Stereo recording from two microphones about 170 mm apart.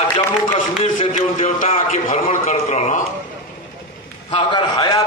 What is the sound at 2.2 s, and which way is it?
Speech, 40° left (ahead or behind).